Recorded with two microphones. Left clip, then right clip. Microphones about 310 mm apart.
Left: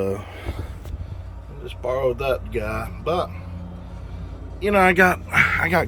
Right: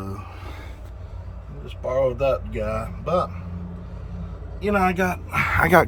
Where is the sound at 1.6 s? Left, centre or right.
Centre.